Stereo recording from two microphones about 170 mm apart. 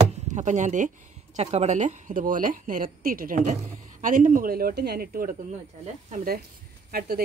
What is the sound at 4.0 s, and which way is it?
Speech, 50° right (ahead or behind).